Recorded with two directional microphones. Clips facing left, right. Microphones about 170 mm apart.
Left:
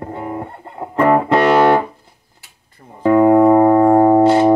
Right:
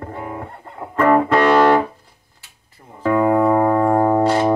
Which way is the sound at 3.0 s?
20° left (ahead or behind).